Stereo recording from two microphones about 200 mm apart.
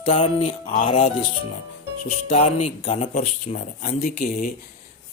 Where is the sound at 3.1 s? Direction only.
45° left (ahead or behind).